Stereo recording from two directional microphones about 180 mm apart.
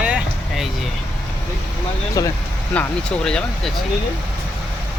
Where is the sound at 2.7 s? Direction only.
5° left (ahead or behind).